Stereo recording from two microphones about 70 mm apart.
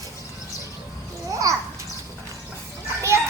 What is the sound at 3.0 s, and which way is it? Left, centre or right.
Children playing, right.